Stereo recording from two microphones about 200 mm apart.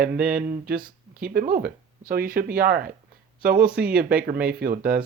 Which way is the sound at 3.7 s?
5° right (ahead or behind).